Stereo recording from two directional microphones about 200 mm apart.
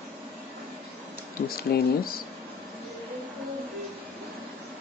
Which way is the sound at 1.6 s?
50° left (ahead or behind).